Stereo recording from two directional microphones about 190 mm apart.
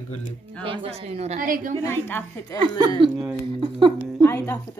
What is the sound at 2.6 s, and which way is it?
Speech, 25° right (ahead or behind).